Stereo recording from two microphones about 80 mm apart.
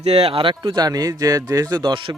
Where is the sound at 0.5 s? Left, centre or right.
Right.